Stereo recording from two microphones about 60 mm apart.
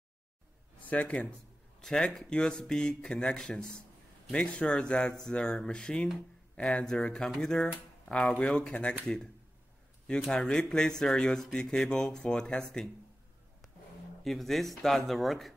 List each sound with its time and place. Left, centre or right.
0.8 s speech: left
10.5 s speech: centre
14.2 s speech: centre